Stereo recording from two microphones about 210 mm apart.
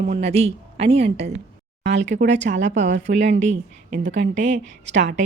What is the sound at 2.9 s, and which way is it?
Speech, 55° right (ahead or behind).